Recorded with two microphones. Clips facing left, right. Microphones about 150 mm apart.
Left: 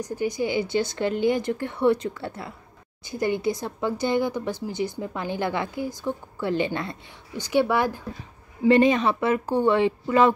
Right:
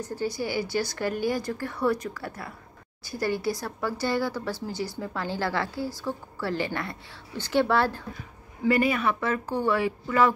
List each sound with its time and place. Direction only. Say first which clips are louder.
0.0 s speech: left 4 dB; 15° left (ahead or behind)
8.6 s speech: left 5 dB; 25° left (ahead or behind)